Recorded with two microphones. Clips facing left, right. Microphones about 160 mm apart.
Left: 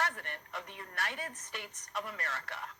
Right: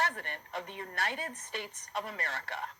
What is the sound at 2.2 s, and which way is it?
Speech, 60° right (ahead or behind).